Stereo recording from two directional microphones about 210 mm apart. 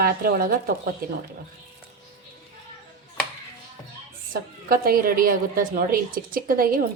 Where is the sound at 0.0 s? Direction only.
45° right (ahead or behind).